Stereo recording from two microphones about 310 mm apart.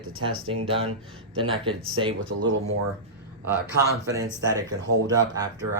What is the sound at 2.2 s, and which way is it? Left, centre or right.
Speech, right.